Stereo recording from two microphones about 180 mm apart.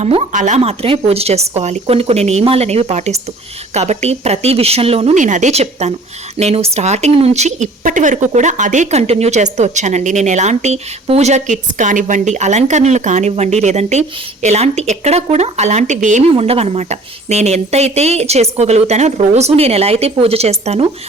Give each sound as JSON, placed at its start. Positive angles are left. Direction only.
{"t": 0.0, "sound": "speech", "side_deg": -35}